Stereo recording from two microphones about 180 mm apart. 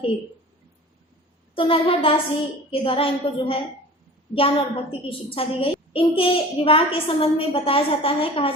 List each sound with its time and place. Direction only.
1.5 s a woman's voice: 30° left (ahead or behind)